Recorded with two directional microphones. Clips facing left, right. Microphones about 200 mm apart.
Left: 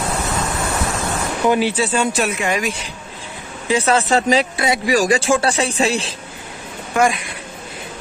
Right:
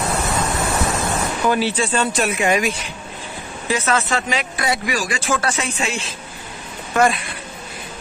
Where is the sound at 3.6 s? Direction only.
30° left (ahead or behind).